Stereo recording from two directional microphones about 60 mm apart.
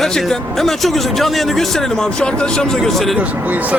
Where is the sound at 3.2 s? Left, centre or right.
Right.